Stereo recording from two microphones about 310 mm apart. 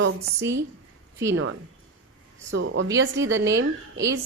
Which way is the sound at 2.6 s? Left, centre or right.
Right.